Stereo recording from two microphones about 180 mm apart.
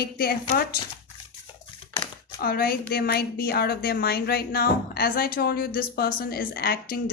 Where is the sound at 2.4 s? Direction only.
55° left (ahead or behind).